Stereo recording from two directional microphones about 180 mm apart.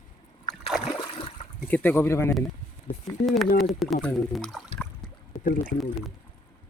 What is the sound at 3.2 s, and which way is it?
Speech, centre (ahead or behind).